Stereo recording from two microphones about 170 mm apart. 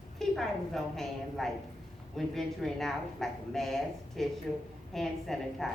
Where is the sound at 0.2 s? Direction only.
Centre (ahead or behind).